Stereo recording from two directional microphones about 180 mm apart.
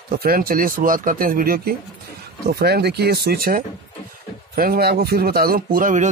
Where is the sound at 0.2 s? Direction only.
55° right (ahead or behind).